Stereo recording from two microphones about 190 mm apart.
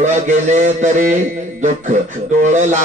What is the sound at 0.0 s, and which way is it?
Mantra, 40° right (ahead or behind).